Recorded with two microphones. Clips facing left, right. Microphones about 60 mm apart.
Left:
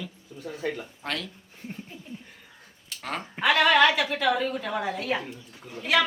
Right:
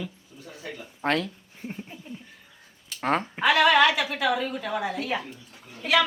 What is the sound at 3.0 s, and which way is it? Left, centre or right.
Speech, right.